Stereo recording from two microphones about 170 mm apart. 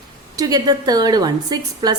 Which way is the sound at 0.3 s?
20° right (ahead or behind).